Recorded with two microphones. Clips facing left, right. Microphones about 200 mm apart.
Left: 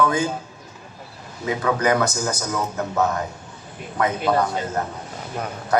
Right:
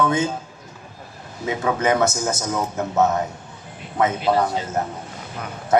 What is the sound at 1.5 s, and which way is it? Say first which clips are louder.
A man's voice: even; 25° right (ahead or behind).